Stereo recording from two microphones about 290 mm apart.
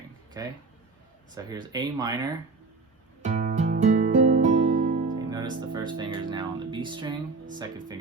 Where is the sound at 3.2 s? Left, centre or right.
Right.